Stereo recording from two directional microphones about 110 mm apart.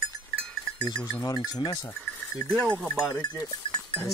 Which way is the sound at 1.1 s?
40° left (ahead or behind).